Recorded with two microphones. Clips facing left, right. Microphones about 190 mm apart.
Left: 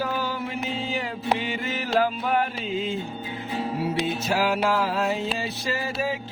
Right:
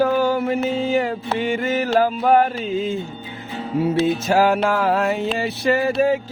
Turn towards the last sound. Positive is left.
turn(degrees=-55)  # may be behind; listen again after turning